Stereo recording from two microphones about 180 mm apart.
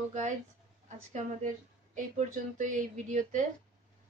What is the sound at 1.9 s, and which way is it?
A woman's voice, 45° right (ahead or behind).